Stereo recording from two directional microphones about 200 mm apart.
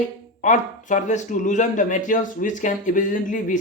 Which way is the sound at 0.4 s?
40° left (ahead or behind).